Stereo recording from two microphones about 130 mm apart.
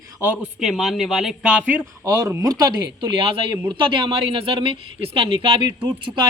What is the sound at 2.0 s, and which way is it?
Speech, 25° right (ahead or behind).